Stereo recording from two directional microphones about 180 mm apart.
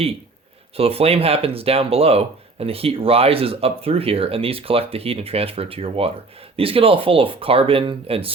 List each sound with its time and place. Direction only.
0.8 s speech: 35° right (ahead or behind)